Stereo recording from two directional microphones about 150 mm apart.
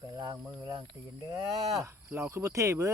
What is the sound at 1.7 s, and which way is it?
Speech, 20° right (ahead or behind).